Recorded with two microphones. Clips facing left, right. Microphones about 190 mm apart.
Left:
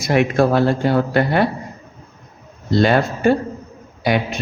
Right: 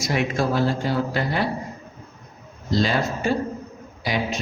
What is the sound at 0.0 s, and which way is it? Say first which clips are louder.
Speech: left 7 dB; 60° left (ahead or behind).